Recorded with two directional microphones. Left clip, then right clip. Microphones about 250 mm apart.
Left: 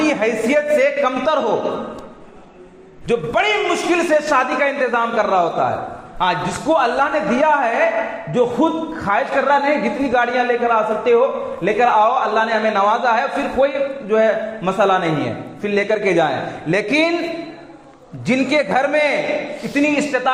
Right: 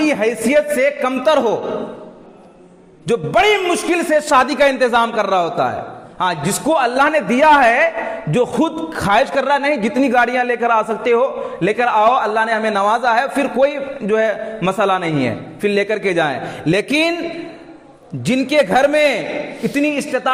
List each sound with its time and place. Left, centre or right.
0.0 s a man's voice: right
3.1 s a man's voice: right
18.3 s a man's voice: right